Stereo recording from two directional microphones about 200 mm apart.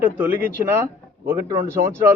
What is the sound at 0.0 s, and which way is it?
A man's voice, 10° right (ahead or behind).